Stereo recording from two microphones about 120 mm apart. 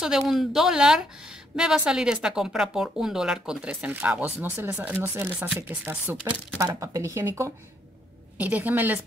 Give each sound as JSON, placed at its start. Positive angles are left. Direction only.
{"t": 0.0, "sound": "speech", "side_deg": -5}
{"t": 6.6, "sound": "speech", "side_deg": -30}